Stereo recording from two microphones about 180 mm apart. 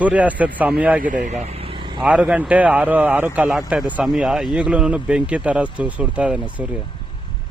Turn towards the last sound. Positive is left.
turn(degrees=-5)  # may be behind; listen again after turning